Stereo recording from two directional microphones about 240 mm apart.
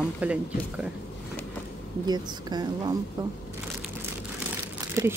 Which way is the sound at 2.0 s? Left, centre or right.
Centre.